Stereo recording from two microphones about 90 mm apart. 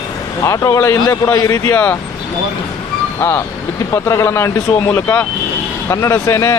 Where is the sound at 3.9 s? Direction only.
35° left (ahead or behind).